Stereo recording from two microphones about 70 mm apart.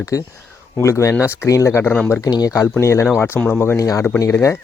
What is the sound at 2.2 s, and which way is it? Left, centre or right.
Speech, left.